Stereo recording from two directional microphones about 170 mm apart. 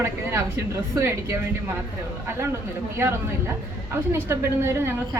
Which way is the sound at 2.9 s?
15° right (ahead or behind).